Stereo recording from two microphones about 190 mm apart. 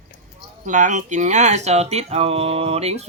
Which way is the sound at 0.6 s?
40° right (ahead or behind).